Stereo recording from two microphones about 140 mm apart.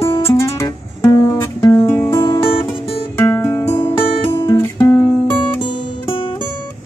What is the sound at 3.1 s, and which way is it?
Guitar, 15° left (ahead or behind).